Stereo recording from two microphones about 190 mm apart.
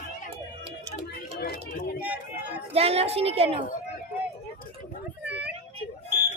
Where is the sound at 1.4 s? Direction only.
55° left (ahead or behind).